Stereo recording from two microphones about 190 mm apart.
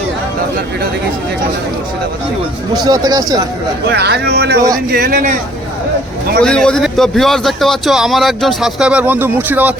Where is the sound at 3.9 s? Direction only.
60° right (ahead or behind).